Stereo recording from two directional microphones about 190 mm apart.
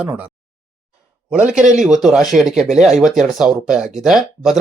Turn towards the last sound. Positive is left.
turn(degrees=0)  # may be behind; listen again after turning